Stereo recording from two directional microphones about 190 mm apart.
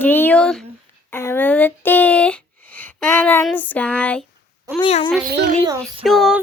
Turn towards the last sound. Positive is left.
turn(degrees=0)  # may be behind; listen again after turning